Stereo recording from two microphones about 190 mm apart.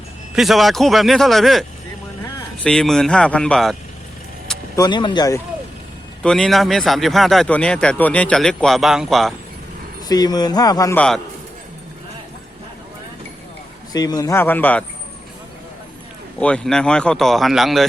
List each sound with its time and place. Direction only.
0.3 s speech: centre (ahead or behind)
2.6 s speech: 5° left (ahead or behind)
4.8 s speech: 25° left (ahead or behind)
6.2 s speech: 5° left (ahead or behind)
10.1 s speech: 20° left (ahead or behind)
13.9 s speech: 20° left (ahead or behind)
16.4 s speech: 5° left (ahead or behind)